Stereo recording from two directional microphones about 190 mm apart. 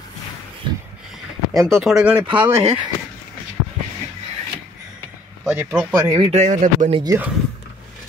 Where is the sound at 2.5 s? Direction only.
30° right (ahead or behind).